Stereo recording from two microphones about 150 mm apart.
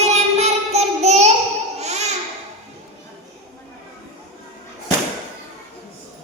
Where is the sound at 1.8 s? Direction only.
50° right (ahead or behind).